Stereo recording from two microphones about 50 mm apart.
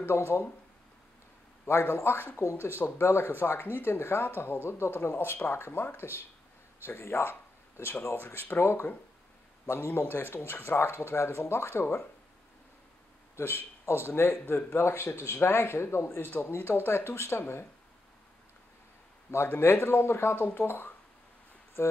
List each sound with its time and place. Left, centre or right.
0.0 s speech: left
1.7 s speech: left
4.6 s speech: left
4.9 s speech: left
13.4 s speech: left
16.3 s speech: left
19.3 s speech: left
21.8 s speech: left